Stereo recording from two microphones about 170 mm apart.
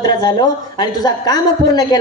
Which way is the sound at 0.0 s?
25° left (ahead or behind).